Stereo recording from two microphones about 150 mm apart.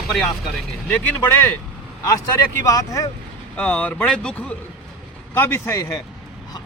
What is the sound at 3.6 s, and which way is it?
A man's voice, 10° left (ahead or behind).